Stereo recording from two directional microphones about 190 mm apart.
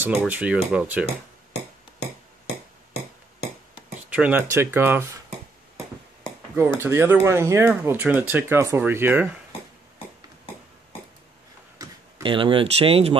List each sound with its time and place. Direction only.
0.0 s speech: 5° right (ahead or behind)
4.1 s speech: 10° right (ahead or behind)
6.8 s speech: 10° right (ahead or behind)
11.8 s speech: 25° right (ahead or behind)